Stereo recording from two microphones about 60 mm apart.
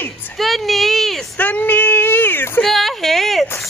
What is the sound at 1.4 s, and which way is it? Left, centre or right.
Speech, left.